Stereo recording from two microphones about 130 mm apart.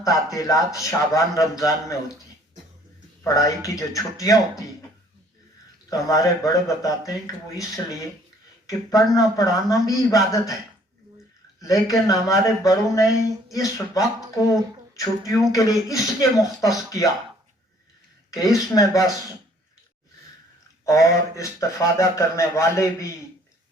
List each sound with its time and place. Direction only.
0.3 s speech: 25° left (ahead or behind)
3.2 s speech: 25° left (ahead or behind)
5.9 s speech: 25° left (ahead or behind)
11.6 s speech: 25° left (ahead or behind)
18.3 s speech: 25° left (ahead or behind)
20.8 s speech: 25° left (ahead or behind)